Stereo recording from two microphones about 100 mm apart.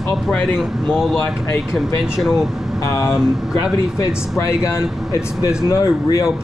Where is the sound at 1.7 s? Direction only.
5° right (ahead or behind).